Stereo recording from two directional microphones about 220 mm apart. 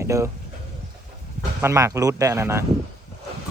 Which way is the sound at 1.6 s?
10° right (ahead or behind).